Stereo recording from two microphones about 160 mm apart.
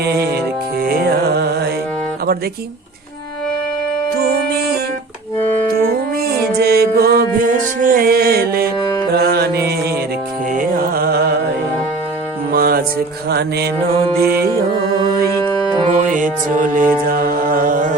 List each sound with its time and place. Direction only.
0.8 s music: 65° right (ahead or behind); by 1.7 s 85° right
4.2 s music: 80° right
6.2 s music: 75° right (ahead or behind)
10.5 s music: 60° right (ahead or behind)
12.5 s music: 70° right (ahead or behind)
16.0 s music: 55° right (ahead or behind)